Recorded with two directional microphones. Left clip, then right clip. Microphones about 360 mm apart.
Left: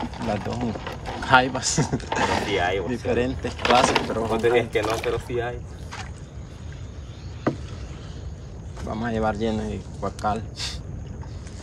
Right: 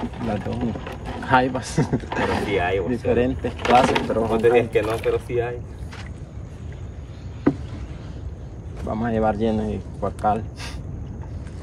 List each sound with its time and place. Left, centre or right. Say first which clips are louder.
0.0 s a sound: even; centre
1.2 s speech: left 1 dB; centre
4.8 s speech: right 2 dB; centre
5.3 s speech: right 3 dB; centre
8.8 s speech: right 3 dB; centre